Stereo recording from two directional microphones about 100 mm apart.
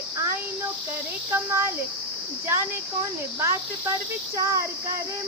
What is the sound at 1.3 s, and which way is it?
Speech, 25° right (ahead or behind).